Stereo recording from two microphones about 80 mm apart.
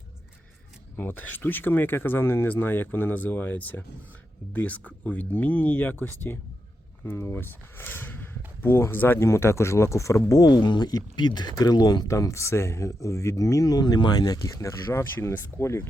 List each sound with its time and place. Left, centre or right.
0.9 s speech: left
10.5 s speech: left
12.0 s speech: left
14.8 s speech: left